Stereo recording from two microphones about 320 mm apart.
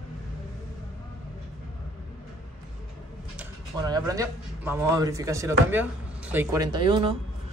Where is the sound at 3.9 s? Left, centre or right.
Centre.